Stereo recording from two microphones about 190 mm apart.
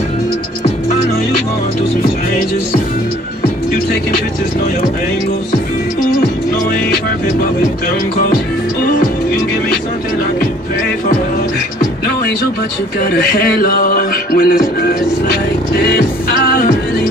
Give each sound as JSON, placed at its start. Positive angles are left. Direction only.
{"t": 13.0, "sound": "music", "side_deg": 50}